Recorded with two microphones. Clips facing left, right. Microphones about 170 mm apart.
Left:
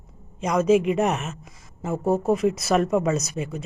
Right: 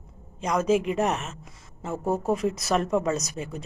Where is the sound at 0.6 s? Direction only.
35° right (ahead or behind).